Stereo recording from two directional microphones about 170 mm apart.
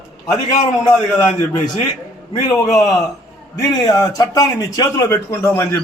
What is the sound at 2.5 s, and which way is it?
Speech, 20° left (ahead or behind).